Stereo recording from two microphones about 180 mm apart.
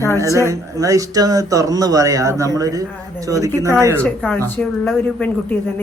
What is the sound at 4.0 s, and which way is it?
Speech, 10° left (ahead or behind).